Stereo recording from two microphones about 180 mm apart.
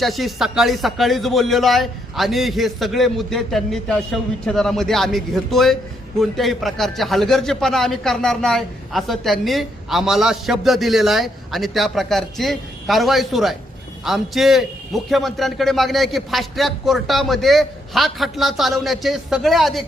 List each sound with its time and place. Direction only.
0.0 s a man's voice: centre (ahead or behind)